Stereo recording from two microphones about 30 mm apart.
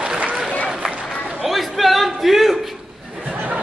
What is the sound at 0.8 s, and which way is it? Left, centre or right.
Run, right.